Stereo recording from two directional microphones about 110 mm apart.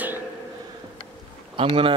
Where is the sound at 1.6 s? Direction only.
55° right (ahead or behind).